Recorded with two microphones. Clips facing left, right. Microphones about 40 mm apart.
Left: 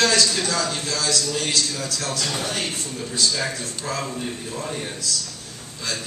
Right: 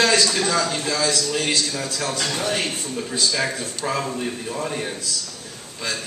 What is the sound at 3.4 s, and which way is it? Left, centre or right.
Speech, right.